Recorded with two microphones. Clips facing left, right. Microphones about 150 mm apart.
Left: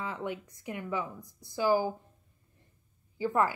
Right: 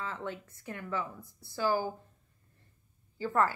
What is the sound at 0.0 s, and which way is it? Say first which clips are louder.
A woman's voice: left 3 dB; 15° left (ahead or behind).